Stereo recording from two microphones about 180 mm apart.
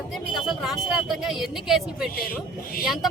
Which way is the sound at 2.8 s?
Centre (ahead or behind).